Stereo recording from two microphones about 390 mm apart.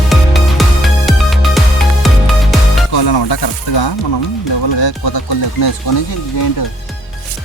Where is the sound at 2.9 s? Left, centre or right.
Left.